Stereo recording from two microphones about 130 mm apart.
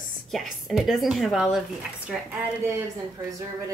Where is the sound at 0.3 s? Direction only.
Centre (ahead or behind).